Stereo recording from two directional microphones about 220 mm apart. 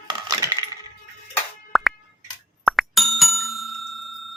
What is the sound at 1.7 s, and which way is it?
Plop, centre (ahead or behind).